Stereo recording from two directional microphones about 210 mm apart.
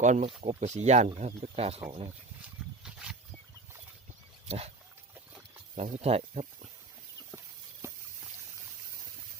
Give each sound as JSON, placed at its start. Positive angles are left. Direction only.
{"t": 0.0, "sound": "speech", "side_deg": -35}
{"t": 2.0, "sound": "wild animals", "side_deg": -5}
{"t": 4.4, "sound": "speech", "side_deg": -30}
{"t": 5.7, "sound": "speech", "side_deg": -30}